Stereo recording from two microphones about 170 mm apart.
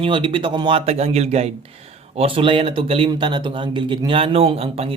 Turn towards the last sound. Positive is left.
turn(degrees=-35)  # may be behind; listen again after turning